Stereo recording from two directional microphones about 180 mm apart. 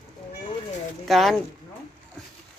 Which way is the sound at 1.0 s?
Centre (ahead or behind).